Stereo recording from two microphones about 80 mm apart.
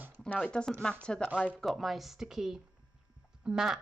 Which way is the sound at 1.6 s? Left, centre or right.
Centre.